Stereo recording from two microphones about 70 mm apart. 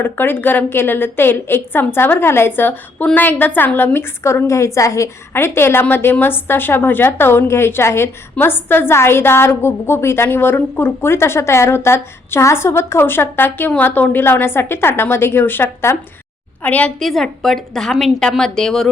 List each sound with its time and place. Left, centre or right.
0.0 s a woman's voice: left
5.3 s a woman's voice: left
16.6 s a woman's voice: left
17.0 s a woman's voice: centre